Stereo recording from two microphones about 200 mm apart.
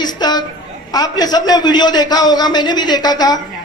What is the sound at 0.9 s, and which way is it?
A man's voice, 20° left (ahead or behind).